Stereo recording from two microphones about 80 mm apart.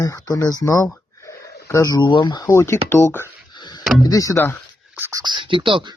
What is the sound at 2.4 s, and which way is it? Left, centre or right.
Speech, left.